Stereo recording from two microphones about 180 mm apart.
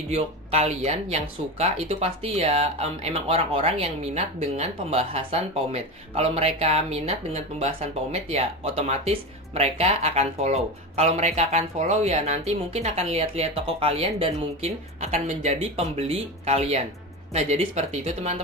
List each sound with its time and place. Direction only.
0.1 s speech: 35° right (ahead or behind)